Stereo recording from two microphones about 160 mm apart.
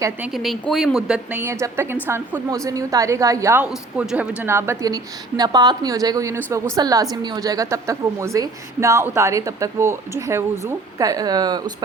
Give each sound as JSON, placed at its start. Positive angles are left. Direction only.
{"t": 0.2, "sound": "a woman's voice", "side_deg": 0}